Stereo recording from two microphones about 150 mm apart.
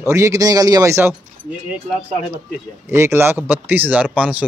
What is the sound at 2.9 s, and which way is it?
Speech, 15° right (ahead or behind).